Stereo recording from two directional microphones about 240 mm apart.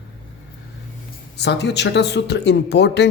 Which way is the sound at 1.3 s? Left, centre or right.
Left.